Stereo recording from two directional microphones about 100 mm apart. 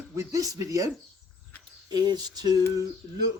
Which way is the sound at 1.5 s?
15° left (ahead or behind).